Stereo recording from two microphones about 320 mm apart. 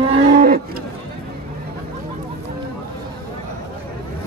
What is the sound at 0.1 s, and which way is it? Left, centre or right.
Cattle, right.